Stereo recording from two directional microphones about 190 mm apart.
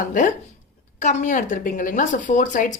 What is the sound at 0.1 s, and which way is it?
Speech, 45° left (ahead or behind).